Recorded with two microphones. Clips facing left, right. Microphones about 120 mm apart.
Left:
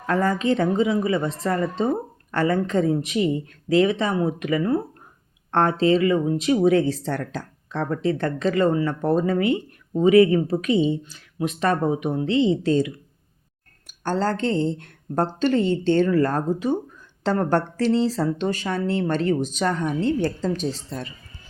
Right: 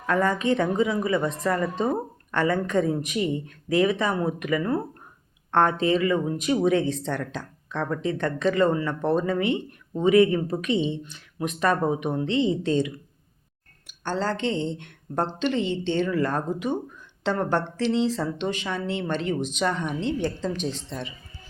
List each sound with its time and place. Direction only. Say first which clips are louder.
0.0 s speech: left 1 dB; 35° left (ahead or behind)
14.0 s speech: left 3 dB; 40° left (ahead or behind)